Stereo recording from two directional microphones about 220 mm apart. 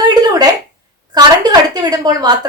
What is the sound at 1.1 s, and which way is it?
A woman's voice, 20° right (ahead or behind).